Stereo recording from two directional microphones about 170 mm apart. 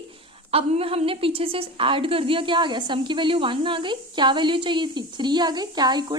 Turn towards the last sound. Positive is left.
turn(degrees=-25)  # may be behind; listen again after turning